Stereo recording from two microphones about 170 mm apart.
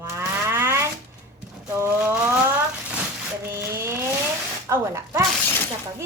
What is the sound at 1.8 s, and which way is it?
Speech, 10° right (ahead or behind).